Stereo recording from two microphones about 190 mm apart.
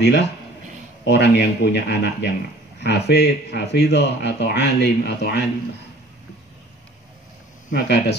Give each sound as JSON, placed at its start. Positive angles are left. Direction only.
{"t": 0.0, "sound": "speech", "side_deg": 65}
{"t": 7.7, "sound": "speech", "side_deg": 60}